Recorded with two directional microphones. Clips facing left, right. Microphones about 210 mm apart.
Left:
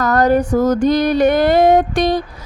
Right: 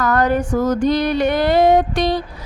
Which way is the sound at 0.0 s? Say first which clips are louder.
Left 3 dB; 40° left (ahead or behind).